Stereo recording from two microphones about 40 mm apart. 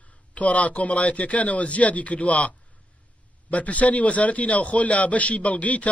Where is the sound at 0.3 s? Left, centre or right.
Left.